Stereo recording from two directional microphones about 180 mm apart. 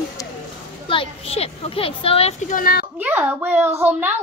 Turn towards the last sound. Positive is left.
turn(degrees=-10)  # may be behind; listen again after turning